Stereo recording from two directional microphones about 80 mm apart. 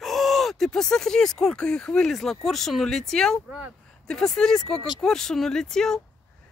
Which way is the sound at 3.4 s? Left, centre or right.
Right.